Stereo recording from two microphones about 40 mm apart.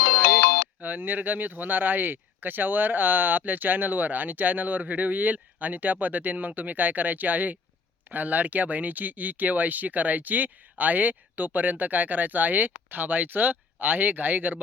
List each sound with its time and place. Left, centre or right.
0.8 s speech: right